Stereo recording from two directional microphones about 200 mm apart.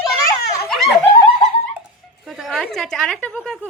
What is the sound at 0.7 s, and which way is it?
Laughter, centre (ahead or behind).